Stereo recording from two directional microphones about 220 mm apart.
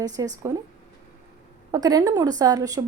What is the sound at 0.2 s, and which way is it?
Speech, 15° right (ahead or behind).